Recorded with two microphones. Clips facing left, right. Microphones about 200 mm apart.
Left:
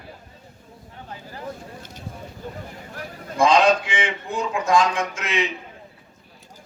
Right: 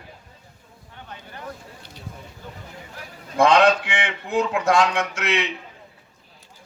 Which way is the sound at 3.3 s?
65° right (ahead or behind).